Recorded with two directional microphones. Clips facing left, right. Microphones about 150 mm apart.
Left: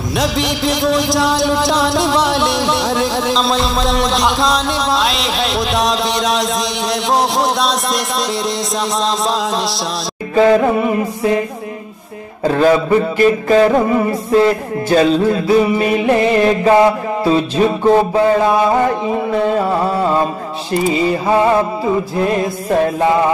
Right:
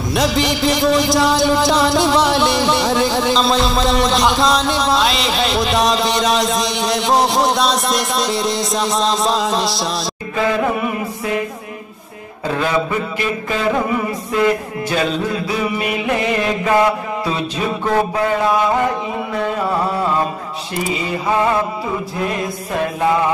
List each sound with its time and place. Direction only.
0.1 s music: centre (ahead or behind)
10.3 s mantra: 35° left (ahead or behind)
12.4 s mantra: 40° left (ahead or behind)
20.9 s a sound: 30° left (ahead or behind)